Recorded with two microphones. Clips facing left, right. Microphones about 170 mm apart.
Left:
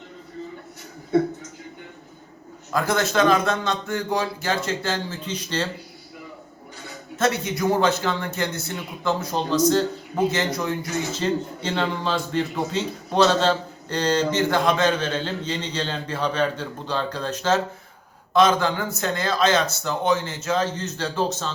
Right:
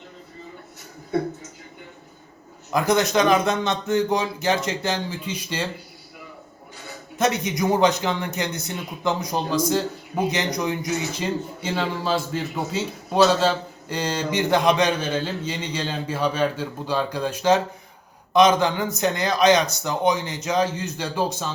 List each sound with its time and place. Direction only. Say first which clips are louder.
2.7 s speech: right 2 dB; 15° right (ahead or behind)
7.2 s speech: even; 15° right (ahead or behind)